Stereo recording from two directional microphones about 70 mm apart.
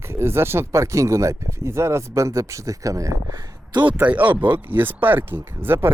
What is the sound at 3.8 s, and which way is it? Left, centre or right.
Speech, right.